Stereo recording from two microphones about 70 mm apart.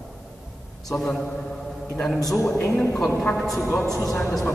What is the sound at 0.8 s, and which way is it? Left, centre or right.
Speech, centre.